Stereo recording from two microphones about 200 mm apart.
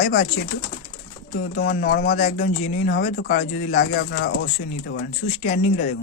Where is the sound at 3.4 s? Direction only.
35° left (ahead or behind).